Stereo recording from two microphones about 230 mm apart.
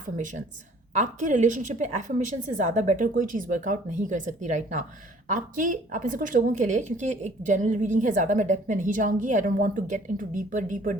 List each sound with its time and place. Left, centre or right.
0.0 s speech: right